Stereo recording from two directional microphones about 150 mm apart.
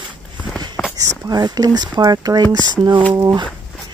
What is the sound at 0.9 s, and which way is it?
Speech, 25° right (ahead or behind).